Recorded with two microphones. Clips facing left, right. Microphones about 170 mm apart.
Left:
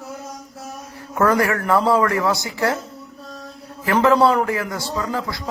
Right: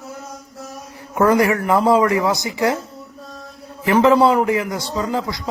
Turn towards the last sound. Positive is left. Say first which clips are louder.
# right 3 dB
turn(degrees=-20)  # may be behind; listen again after turning